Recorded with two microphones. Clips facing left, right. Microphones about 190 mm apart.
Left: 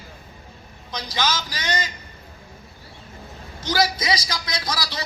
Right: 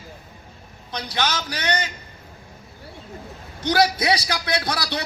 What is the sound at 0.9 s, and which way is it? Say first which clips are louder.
A man's voice: even; 60° right (ahead or behind).